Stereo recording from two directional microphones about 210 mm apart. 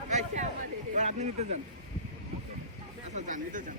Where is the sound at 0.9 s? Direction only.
35° right (ahead or behind).